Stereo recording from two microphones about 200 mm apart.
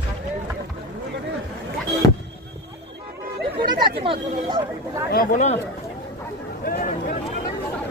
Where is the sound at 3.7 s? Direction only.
20° right (ahead or behind).